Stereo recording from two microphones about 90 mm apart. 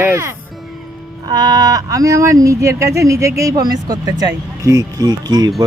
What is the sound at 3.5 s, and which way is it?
Speech, 50° right (ahead or behind).